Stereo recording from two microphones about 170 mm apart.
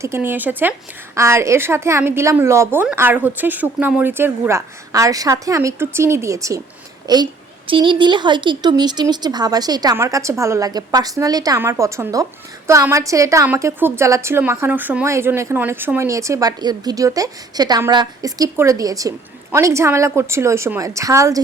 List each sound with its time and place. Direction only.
0.0 s speech: 15° right (ahead or behind)